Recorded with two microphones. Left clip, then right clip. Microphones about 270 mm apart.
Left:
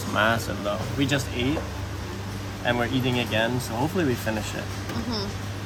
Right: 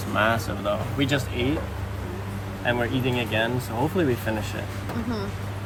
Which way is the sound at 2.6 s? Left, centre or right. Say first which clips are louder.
Even; centre.